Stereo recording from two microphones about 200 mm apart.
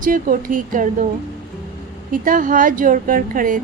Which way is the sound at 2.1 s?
40° right (ahead or behind).